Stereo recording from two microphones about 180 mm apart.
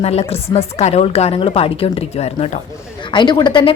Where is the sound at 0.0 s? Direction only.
35° left (ahead or behind).